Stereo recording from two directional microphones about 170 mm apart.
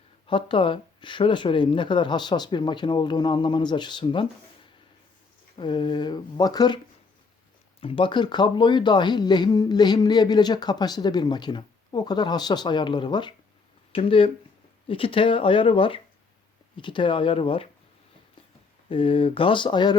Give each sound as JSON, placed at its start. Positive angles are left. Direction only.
{"t": 0.3, "sound": "speech", "side_deg": 30}
{"t": 5.5, "sound": "speech", "side_deg": 25}
{"t": 7.8, "sound": "speech", "side_deg": 30}
{"t": 18.9, "sound": "speech", "side_deg": 30}